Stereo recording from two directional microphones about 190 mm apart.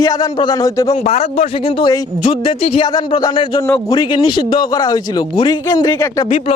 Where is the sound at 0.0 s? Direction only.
20° left (ahead or behind).